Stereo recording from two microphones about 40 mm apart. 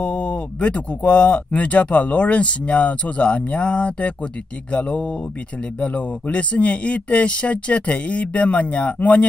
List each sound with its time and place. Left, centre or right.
0.0 s speech: left